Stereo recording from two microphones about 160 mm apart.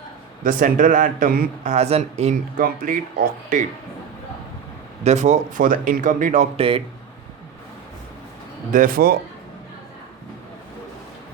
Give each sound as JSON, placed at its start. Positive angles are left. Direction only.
{"t": 0.4, "sound": "speech", "side_deg": -55}
{"t": 1.7, "sound": "speech", "side_deg": -45}
{"t": 2.6, "sound": "speech", "side_deg": -60}
{"t": 5.0, "sound": "speech", "side_deg": -45}
{"t": 6.6, "sound": "speech", "side_deg": -35}
{"t": 8.7, "sound": "speech", "side_deg": -60}